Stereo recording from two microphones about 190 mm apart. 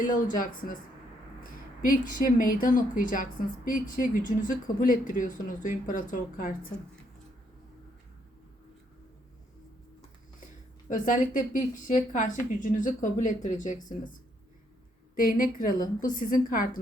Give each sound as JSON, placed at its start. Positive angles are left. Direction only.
{"t": 0.3, "sound": "a woman's voice", "side_deg": 45}
{"t": 1.8, "sound": "a woman's voice", "side_deg": 45}
{"t": 10.8, "sound": "a woman's voice", "side_deg": 45}
{"t": 15.1, "sound": "a woman's voice", "side_deg": 45}